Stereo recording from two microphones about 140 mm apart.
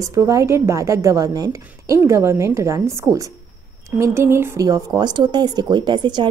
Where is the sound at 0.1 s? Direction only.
20° right (ahead or behind).